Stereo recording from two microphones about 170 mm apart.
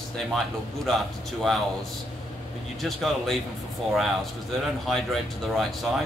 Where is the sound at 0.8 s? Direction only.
Centre (ahead or behind).